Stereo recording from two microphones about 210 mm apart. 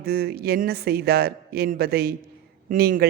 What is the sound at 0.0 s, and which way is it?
A woman's voice, 45° right (ahead or behind).